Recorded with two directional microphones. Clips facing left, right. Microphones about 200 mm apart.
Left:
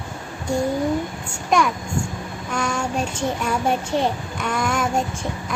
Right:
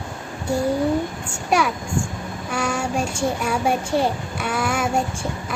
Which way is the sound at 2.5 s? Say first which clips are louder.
Right 1 dB; 10° right (ahead or behind).